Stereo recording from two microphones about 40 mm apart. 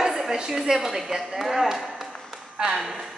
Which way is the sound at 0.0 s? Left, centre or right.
Centre.